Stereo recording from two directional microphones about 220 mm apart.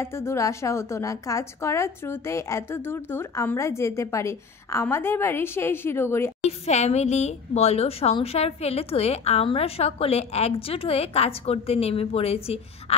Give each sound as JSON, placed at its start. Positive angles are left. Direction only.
{"t": 0.0, "sound": "a woman's voice", "side_deg": 10}
{"t": 6.4, "sound": "a woman's voice", "side_deg": 30}